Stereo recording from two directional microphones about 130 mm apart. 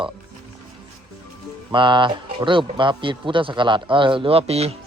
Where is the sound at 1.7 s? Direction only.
40° right (ahead or behind).